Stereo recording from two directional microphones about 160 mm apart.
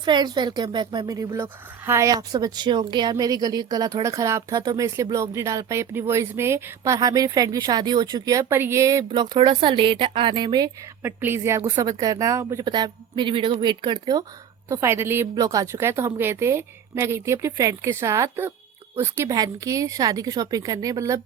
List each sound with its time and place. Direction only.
0.0 s speech: 25° right (ahead or behind)
9.0 s speech: 30° right (ahead or behind)
11.0 s a woman's voice: 15° right (ahead or behind)